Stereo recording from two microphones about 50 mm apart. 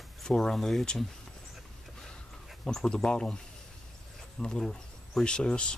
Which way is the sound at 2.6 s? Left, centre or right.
Centre.